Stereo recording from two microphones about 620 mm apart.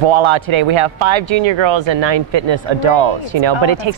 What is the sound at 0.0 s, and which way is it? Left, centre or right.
Speech, right.